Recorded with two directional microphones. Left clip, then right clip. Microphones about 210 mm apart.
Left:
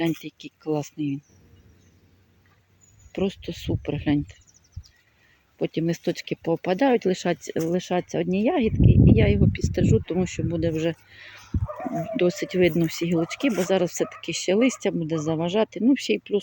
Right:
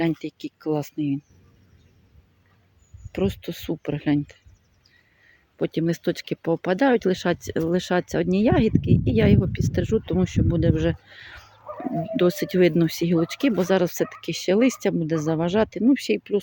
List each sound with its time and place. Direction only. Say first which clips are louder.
0.2 s speech: right 6 dB; 5° right (ahead or behind)
3.1 s speech: right 1 dB; 10° right (ahead or behind)
5.5 s speech: right 1 dB; 10° right (ahead or behind)